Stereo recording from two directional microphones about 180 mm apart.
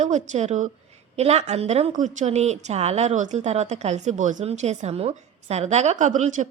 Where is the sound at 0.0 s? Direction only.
40° right (ahead or behind).